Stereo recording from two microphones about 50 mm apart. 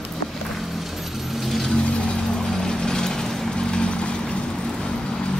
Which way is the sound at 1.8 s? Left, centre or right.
Centre.